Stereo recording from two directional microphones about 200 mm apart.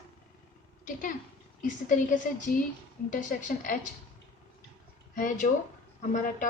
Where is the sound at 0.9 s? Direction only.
40° left (ahead or behind).